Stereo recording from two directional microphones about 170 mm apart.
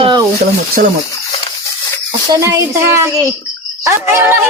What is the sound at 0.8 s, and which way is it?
Speech, 60° right (ahead or behind).